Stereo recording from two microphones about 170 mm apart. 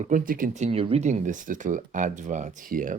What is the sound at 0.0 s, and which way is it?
Speech, 50° right (ahead or behind).